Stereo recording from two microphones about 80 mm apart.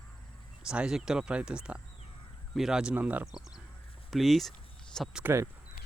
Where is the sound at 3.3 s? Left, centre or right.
Centre.